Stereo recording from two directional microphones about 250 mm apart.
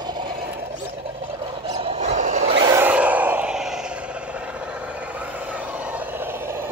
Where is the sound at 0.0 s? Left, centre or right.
Centre.